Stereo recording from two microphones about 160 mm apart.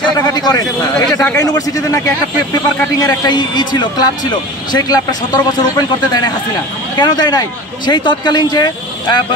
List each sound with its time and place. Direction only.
0.0 s speech: 25° left (ahead or behind)
3.0 s speech: 25° left (ahead or behind)